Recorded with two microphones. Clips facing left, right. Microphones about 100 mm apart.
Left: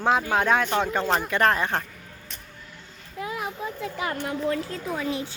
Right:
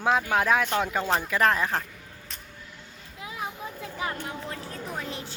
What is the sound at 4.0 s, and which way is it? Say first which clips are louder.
Speech: left 5 dB; 75° left (ahead or behind).